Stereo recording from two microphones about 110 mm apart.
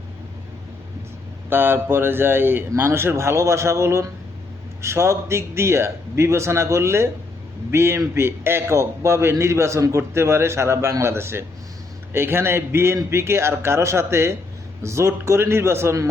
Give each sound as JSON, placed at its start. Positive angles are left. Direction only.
{"t": 1.5, "sound": "a man's voice", "side_deg": -20}